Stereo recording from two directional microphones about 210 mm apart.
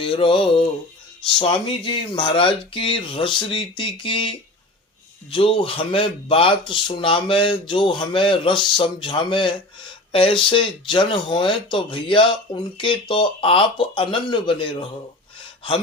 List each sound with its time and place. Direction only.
0.0 s speech: 25° left (ahead or behind)